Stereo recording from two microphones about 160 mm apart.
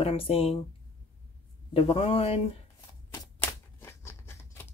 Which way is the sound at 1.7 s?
35° left (ahead or behind).